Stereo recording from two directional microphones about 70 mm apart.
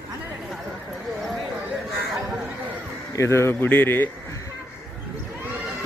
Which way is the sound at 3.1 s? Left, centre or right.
Left.